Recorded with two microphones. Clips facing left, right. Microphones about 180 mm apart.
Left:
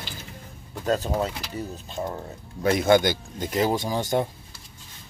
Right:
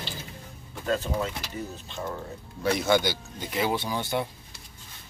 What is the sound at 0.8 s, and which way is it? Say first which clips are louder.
Speech: left 3 dB; 40° left (ahead or behind).